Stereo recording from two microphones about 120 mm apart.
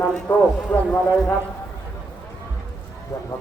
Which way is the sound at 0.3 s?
15° left (ahead or behind).